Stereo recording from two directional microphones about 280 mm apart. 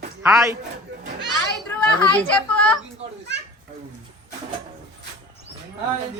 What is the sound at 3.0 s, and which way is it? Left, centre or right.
Children playing, right.